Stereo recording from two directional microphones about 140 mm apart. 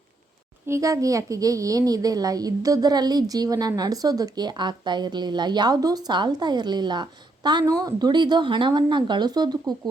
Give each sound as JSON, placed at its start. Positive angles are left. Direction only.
{"t": 0.7, "sound": "a child's voice", "side_deg": -25}